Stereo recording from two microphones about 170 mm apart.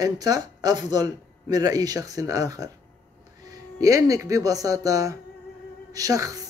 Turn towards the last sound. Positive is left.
turn(degrees=-20)  # may be behind; listen again after turning